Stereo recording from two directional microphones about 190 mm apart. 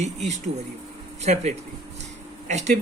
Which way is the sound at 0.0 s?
40° right (ahead or behind).